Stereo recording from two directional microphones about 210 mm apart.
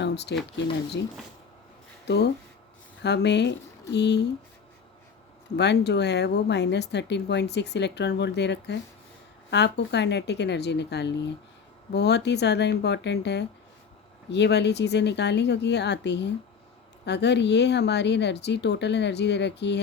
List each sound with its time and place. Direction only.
0.0 s a sound: 55° left (ahead or behind)
2.0 s speech: 50° left (ahead or behind)
5.5 s speech: 55° left (ahead or behind)